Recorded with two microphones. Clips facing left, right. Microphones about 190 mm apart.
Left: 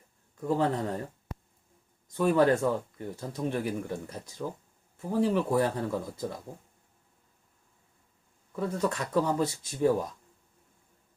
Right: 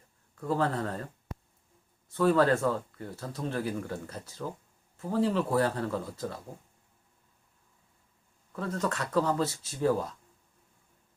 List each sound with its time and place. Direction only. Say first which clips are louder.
0.3 s speech: left 2 dB; 15° left (ahead or behind)
2.1 s speech: left 1 dB; 15° left (ahead or behind)
8.5 s speech: left 2 dB; 10° left (ahead or behind)